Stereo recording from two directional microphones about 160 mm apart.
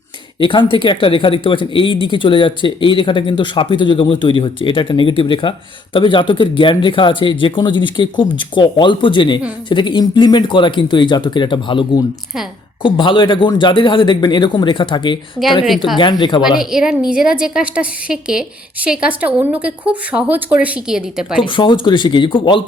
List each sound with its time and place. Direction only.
0.3 s speech: 30° left (ahead or behind)
16.6 s a woman's voice: centre (ahead or behind)
21.4 s speech: 30° left (ahead or behind)